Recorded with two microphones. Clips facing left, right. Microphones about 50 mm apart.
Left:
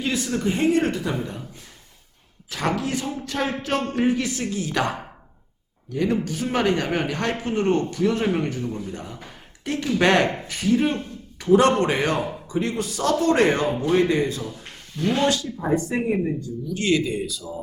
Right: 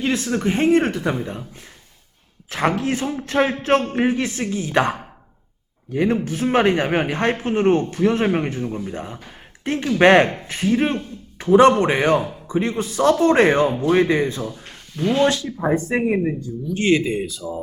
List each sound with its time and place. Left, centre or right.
0.0 s a man's voice: right
2.5 s a man's voice: right